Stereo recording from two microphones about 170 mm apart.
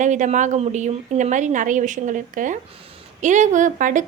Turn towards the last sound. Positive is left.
turn(degrees=-50)  # may be behind; listen again after turning